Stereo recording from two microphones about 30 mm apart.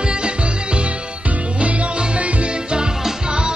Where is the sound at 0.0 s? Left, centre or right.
Right.